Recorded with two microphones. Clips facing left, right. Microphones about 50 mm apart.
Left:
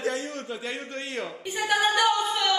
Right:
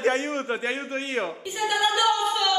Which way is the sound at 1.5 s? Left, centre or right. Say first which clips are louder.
Left 1 dB; left.